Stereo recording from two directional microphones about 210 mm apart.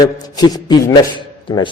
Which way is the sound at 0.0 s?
20° left (ahead or behind).